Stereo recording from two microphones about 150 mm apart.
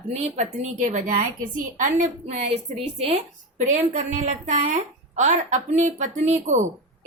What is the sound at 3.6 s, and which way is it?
A woman's voice, 55° right (ahead or behind).